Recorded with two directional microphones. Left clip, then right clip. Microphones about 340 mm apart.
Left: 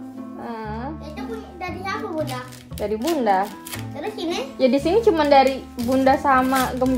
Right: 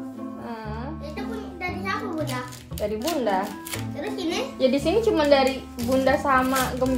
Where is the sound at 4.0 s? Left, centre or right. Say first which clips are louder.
Left 2 dB; centre.